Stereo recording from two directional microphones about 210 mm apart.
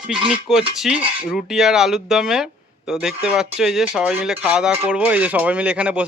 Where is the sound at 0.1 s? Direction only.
5° right (ahead or behind).